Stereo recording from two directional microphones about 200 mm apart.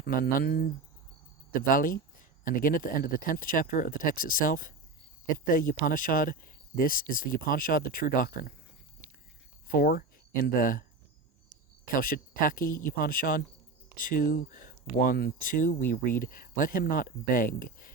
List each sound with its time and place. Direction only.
0.0 s speech: 45° left (ahead or behind)
1.7 s speech: 45° left (ahead or behind)
9.6 s speech: 45° left (ahead or behind)
11.9 s speech: 45° left (ahead or behind)